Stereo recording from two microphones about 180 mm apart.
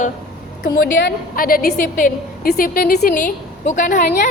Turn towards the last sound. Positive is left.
turn(degrees=45)  # may be behind; listen again after turning